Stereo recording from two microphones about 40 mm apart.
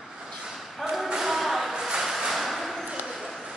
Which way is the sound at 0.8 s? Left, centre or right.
Centre.